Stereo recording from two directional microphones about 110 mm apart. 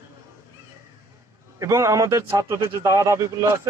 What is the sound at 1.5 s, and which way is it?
A man's voice, 30° right (ahead or behind).